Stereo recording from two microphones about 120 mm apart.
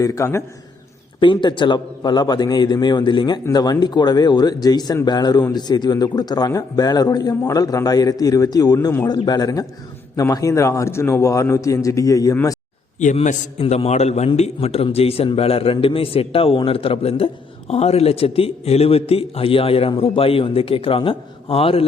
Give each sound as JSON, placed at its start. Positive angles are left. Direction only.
{"t": 0.0, "sound": "speech", "side_deg": 25}
{"t": 1.2, "sound": "a man's voice", "side_deg": 40}
{"t": 13.6, "sound": "a man's voice", "side_deg": 55}